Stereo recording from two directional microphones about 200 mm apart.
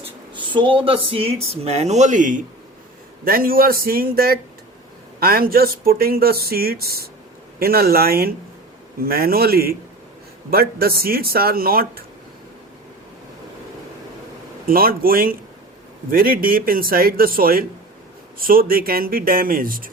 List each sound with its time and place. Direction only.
0.0 s speech: 25° right (ahead or behind); by 12.0 s 50° right (ahead or behind)
14.7 s speech: 45° right (ahead or behind)